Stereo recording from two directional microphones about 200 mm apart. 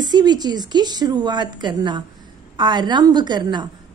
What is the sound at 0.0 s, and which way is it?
A woman's voice, 20° right (ahead or behind).